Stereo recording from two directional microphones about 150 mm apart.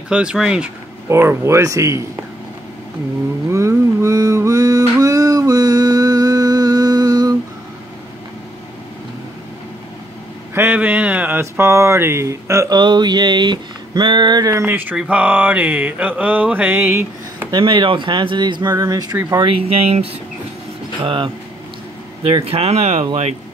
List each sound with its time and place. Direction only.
0.1 s speech: 5° right (ahead or behind)
1.0 s speech: 15° right (ahead or behind)
3.4 s a sound: 20° right (ahead or behind)
10.5 s speech: 15° right (ahead or behind)
17.5 s speech: 30° right (ahead or behind)
19.4 s speech: 40° right (ahead or behind)
22.3 s speech: 40° right (ahead or behind)